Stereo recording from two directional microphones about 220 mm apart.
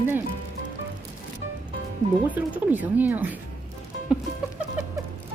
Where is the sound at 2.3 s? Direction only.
5° right (ahead or behind).